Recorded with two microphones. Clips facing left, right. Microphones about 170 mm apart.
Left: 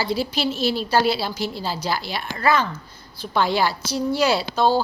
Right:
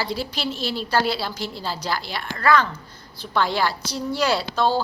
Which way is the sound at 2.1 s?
20° left (ahead or behind).